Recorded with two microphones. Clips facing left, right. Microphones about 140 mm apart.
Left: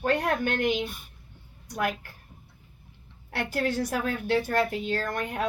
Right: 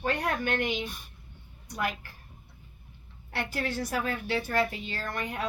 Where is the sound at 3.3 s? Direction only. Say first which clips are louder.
Left 4 dB; 55° left (ahead or behind).